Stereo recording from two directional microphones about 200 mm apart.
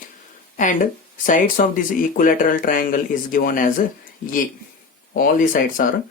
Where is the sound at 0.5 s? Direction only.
40° left (ahead or behind).